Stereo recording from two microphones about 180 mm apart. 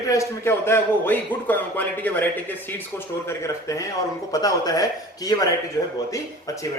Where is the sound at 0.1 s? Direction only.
15° left (ahead or behind).